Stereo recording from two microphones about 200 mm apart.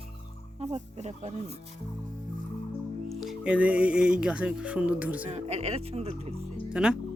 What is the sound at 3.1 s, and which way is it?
Speech, centre (ahead or behind).